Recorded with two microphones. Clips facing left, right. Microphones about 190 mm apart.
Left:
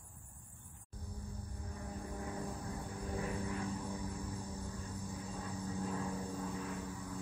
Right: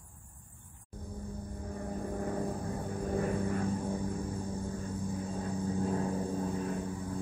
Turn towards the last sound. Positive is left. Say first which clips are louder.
# right 7 dB
turn(degrees=-50)  # may be behind; listen again after turning